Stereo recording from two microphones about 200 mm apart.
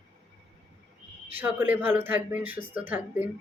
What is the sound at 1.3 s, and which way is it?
Speech, 10° right (ahead or behind).